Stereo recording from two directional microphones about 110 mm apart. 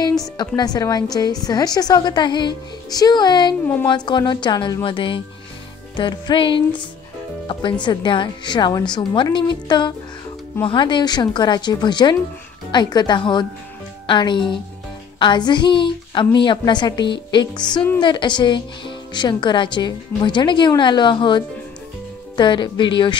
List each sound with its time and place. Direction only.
0.6 s a woman's voice: 35° left (ahead or behind); by 6.8 s 50° left (ahead or behind)
7.8 s a woman's voice: 45° left (ahead or behind)